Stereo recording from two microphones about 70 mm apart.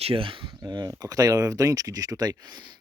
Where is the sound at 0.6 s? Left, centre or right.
Right.